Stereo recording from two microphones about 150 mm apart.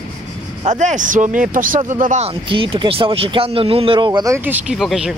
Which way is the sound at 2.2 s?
35° right (ahead or behind).